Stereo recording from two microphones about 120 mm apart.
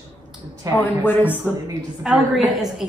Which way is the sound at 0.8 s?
15° left (ahead or behind).